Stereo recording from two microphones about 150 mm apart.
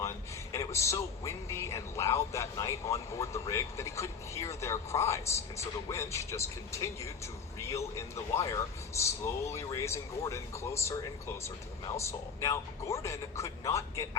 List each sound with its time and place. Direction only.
0.5 s a man's voice: 20° left (ahead or behind)